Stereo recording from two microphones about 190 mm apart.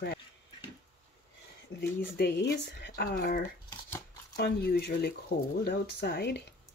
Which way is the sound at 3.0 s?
50° left (ahead or behind).